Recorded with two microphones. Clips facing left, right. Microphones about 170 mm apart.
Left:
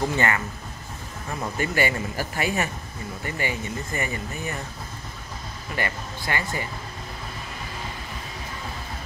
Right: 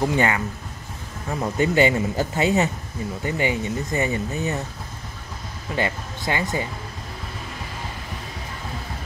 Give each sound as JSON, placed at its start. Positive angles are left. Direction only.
{"t": 0.0, "sound": "speech", "side_deg": -15}
{"t": 1.4, "sound": "speech", "side_deg": -20}
{"t": 5.8, "sound": "speech", "side_deg": -20}